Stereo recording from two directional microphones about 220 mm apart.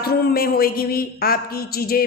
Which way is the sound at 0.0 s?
45° left (ahead or behind).